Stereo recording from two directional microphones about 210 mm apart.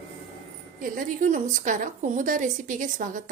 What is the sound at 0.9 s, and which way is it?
A woman's voice, 35° right (ahead or behind).